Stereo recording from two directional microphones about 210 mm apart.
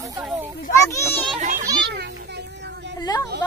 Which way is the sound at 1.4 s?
40° right (ahead or behind).